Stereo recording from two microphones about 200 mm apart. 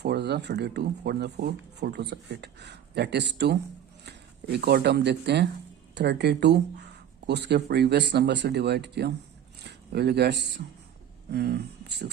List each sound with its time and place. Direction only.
0.0 s speech: 55° right (ahead or behind)